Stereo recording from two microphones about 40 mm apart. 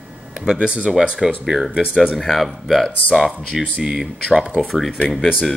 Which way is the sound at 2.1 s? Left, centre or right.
Centre.